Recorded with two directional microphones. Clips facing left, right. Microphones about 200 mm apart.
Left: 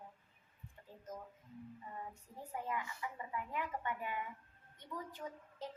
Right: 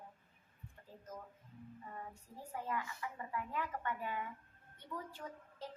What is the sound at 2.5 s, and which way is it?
A woman's voice, 15° left (ahead or behind).